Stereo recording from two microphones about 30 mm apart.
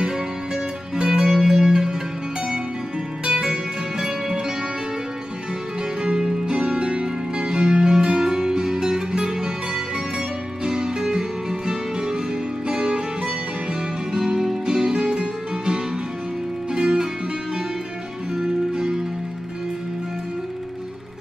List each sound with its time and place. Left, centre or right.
0.9 s music: centre
6.0 s music: right
6.8 s music: right
18.3 s music: right